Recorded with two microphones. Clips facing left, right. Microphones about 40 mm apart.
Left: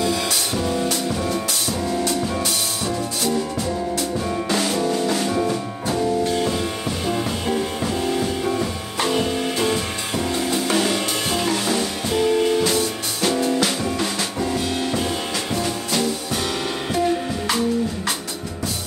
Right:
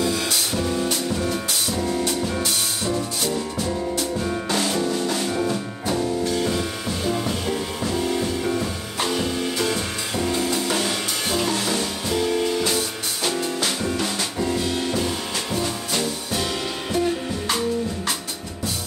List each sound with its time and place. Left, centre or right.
0.6 s music: centre
4.2 s music: centre
7.1 s music: centre
9.1 s music: centre
10.2 s music: centre
15.6 s music: centre